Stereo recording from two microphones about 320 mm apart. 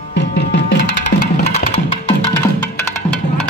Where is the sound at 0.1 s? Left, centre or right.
Left.